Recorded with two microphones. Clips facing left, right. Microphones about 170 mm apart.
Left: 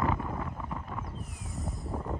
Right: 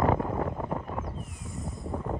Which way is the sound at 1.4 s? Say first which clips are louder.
Right 1 dB; centre (ahead or behind).